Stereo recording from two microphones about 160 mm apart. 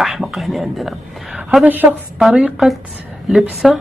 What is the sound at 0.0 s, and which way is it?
Speech, centre (ahead or behind).